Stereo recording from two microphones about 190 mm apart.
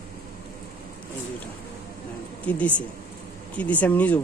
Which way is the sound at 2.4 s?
5° left (ahead or behind).